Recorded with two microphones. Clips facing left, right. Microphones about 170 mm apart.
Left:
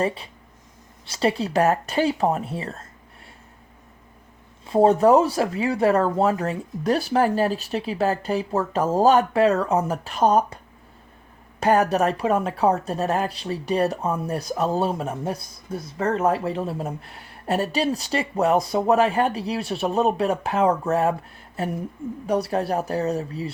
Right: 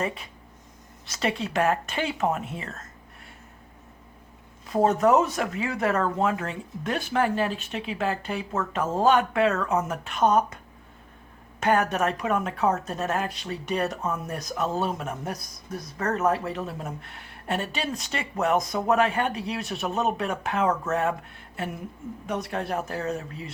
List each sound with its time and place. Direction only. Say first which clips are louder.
0.0 s a woman's voice: left 5 dB; 30° left (ahead or behind)
4.6 s a woman's voice: left 5 dB; 30° left (ahead or behind)
11.6 s a woman's voice: left 4 dB; 35° left (ahead or behind)